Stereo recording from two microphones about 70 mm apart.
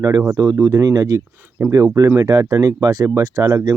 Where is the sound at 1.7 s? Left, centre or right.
Right.